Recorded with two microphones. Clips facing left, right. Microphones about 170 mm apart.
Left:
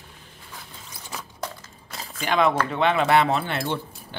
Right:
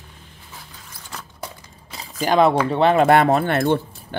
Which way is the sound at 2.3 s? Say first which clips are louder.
Right 5 dB; 35° right (ahead or behind).